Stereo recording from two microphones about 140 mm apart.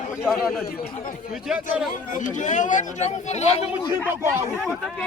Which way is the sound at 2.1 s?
65° left (ahead or behind).